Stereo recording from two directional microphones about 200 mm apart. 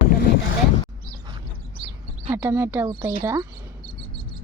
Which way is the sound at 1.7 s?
25° right (ahead or behind).